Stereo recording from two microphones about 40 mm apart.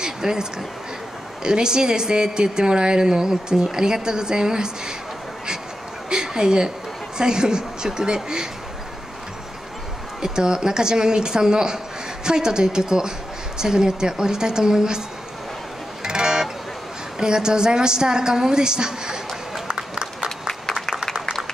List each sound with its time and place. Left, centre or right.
0.0 s a woman's voice: centre
6.0 s a sound: centre
7.2 s a woman's voice: centre
10.2 s a woman's voice: centre
16.0 s music: centre
17.2 s a woman's voice: centre
19.7 s run: right